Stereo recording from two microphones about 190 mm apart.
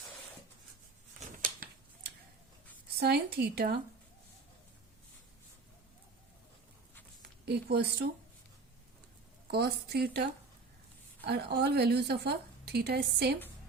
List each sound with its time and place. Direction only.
1.3 s a sound: 45° right (ahead or behind)
3.0 s a woman's voice: 55° right (ahead or behind)
7.2 s speech: 60° right (ahead or behind)
9.5 s a woman's voice: 55° right (ahead or behind)
11.3 s a woman's voice: 60° right (ahead or behind)